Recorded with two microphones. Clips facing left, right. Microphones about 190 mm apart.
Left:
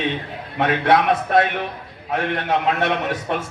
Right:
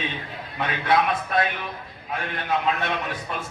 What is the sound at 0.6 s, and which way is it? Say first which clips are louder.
A man's voice: left 5 dB; 75° left (ahead or behind).